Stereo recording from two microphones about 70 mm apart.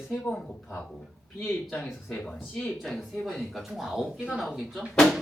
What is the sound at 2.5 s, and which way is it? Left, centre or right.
Speech, centre.